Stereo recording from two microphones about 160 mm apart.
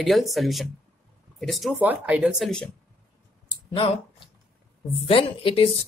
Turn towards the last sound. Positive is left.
turn(degrees=35)  # may be behind; listen again after turning